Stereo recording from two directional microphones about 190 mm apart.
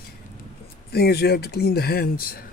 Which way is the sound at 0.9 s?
55° left (ahead or behind).